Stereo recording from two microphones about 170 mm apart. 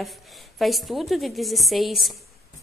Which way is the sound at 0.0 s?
Centre (ahead or behind).